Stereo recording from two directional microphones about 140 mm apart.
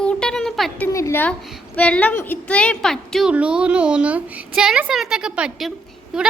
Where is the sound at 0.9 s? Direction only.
20° left (ahead or behind).